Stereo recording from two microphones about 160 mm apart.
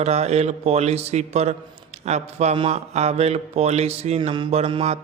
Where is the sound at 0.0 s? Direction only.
40° right (ahead or behind).